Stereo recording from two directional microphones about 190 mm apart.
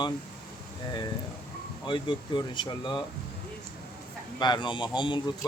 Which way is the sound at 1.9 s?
25° left (ahead or behind).